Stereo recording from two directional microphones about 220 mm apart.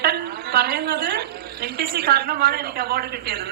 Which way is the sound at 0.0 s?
45° right (ahead or behind).